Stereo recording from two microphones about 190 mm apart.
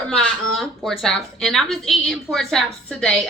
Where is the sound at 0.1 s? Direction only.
Centre (ahead or behind).